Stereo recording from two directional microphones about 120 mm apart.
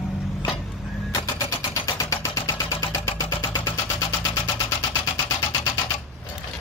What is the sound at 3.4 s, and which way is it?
Vehicle, 40° left (ahead or behind).